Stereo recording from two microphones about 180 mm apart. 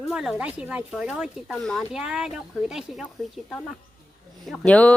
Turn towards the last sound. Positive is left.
turn(degrees=5)  # may be behind; listen again after turning